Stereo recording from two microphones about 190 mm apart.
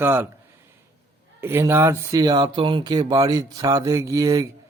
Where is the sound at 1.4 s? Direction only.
10° right (ahead or behind).